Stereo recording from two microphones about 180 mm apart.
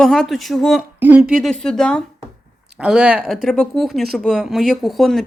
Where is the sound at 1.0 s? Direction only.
10° right (ahead or behind).